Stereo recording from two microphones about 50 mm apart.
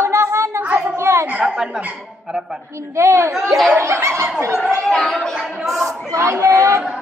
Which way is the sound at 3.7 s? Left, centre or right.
Right.